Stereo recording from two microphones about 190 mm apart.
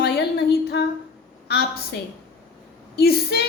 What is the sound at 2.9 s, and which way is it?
Speech, 55° left (ahead or behind).